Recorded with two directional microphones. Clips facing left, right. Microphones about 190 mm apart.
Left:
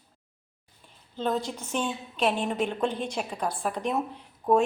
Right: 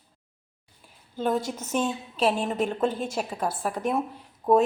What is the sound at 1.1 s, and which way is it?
A woman's voice, 10° right (ahead or behind).